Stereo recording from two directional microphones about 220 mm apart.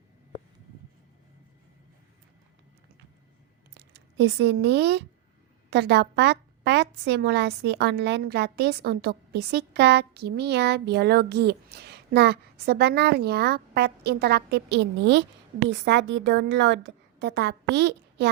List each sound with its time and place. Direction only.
3.8 s a woman's voice: 50° right (ahead or behind)